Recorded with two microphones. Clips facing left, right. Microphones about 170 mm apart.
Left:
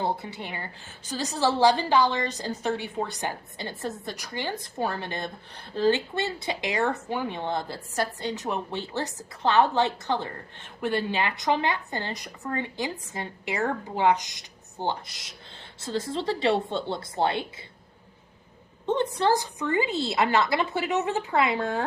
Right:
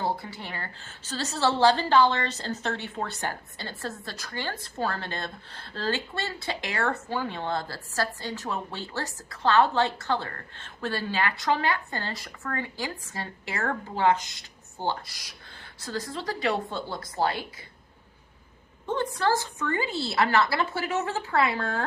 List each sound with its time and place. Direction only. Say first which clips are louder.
0.0 s a woman's voice: left 1 dB; 20° left (ahead or behind)
18.9 s a woman's voice: left 3 dB; 20° left (ahead or behind)